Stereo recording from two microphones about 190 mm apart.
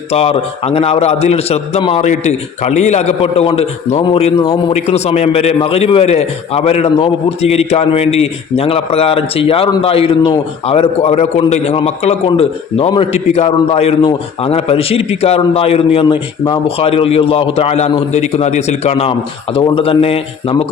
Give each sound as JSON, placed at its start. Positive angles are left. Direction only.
{"t": 0.1, "sound": "a man's voice", "side_deg": 30}